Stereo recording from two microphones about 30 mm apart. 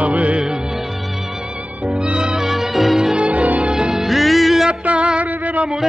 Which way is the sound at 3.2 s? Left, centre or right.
Right.